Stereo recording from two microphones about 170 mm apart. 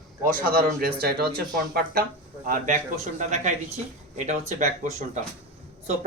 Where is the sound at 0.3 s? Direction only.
55° right (ahead or behind).